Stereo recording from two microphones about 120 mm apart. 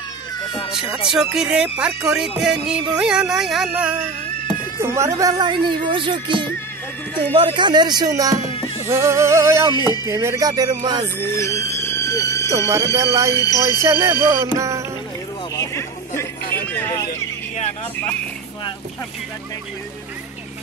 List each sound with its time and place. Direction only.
0.7 s speech: 5° right (ahead or behind)
4.7 s music: 25° right (ahead or behind)
5.4 s speech: 40° right (ahead or behind)
8.9 s music: 25° right (ahead or behind)
11.1 s speech: 20° left (ahead or behind)
12.5 s music: 25° right (ahead or behind)
13.3 s speech: 30° left (ahead or behind)
13.7 s music: 25° right (ahead or behind)
15.5 s music: 25° left (ahead or behind)